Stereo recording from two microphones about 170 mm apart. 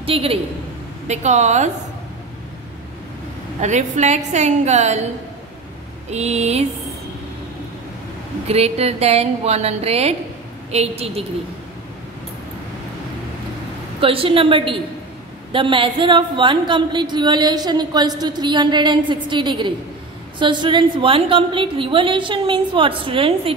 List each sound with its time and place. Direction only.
0.0 s a woman's voice: 35° right (ahead or behind)
3.6 s a woman's voice: 45° right (ahead or behind)
6.0 s a woman's voice: 40° right (ahead or behind)
8.5 s a woman's voice: 40° right (ahead or behind)
14.0 s a woman's voice: 30° right (ahead or behind)